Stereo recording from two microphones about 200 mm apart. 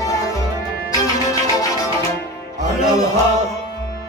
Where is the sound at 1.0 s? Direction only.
15° left (ahead or behind).